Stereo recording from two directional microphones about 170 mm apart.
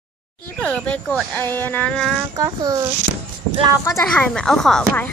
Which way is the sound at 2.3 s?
20° right (ahead or behind).